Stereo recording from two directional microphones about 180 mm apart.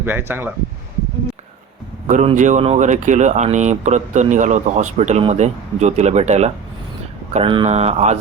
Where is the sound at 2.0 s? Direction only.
45° right (ahead or behind).